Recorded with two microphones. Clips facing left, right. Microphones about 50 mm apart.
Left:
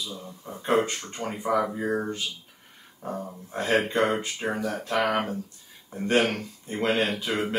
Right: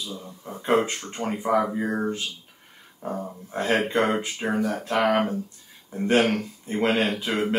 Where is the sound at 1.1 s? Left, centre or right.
Right.